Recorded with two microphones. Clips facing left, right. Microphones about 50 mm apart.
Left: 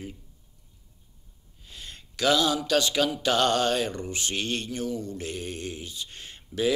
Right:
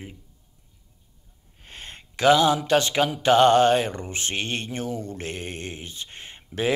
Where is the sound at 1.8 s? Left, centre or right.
Right.